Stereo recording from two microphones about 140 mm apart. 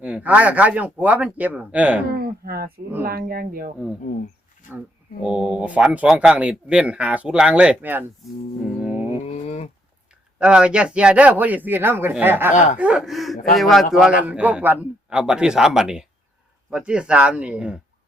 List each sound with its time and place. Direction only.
0.0 s speech: 10° right (ahead or behind)
2.0 s speech: 90° right
5.2 s speech: 5° right (ahead or behind)
8.8 s a sound: 10° right (ahead or behind)
9.2 s a sound: 45° left (ahead or behind)
10.4 s a man's voice: 5° right (ahead or behind)